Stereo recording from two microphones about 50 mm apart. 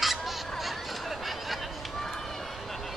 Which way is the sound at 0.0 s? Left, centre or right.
Centre.